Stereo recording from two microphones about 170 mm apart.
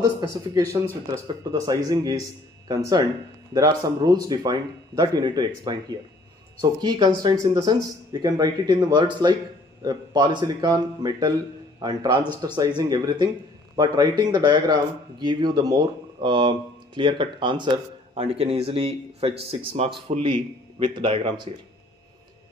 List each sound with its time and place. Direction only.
1.2 s speech: 25° right (ahead or behind)